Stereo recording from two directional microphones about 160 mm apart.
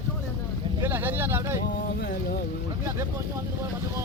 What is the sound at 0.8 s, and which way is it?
Vehicle, 15° right (ahead or behind).